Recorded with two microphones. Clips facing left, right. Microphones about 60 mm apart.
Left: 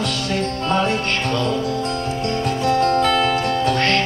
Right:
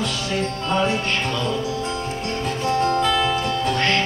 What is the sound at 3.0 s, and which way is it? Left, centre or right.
Music, left.